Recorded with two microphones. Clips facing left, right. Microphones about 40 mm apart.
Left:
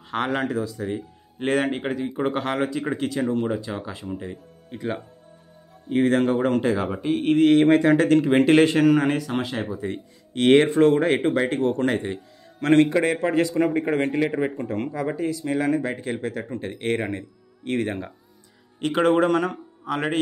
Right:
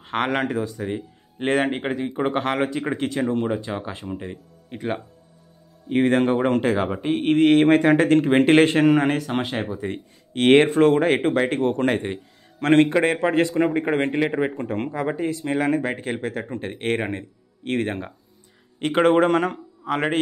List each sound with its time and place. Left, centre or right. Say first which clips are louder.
0.0 s speech: right 2 dB; right